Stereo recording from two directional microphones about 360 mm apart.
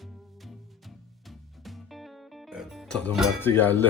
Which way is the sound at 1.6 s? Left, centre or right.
Centre.